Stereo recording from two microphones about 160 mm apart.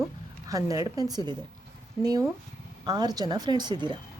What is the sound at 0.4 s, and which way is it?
A woman's voice, 20° right (ahead or behind).